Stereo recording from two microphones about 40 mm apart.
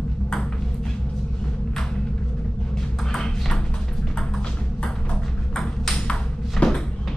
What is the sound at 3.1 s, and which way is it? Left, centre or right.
Ping, centre.